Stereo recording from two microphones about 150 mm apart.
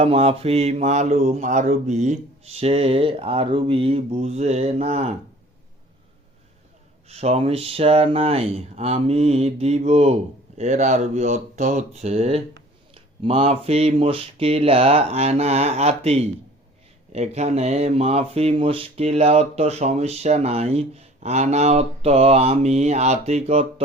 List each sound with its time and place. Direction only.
0.0 s speech: 45° right (ahead or behind)
7.1 s speech: 45° right (ahead or behind)